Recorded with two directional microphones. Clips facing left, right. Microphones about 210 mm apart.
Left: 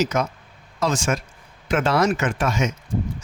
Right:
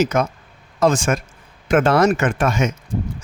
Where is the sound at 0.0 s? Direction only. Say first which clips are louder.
Right 4 dB; 55° right (ahead or behind).